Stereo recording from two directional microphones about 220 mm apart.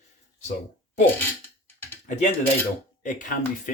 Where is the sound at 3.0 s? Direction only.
35° left (ahead or behind).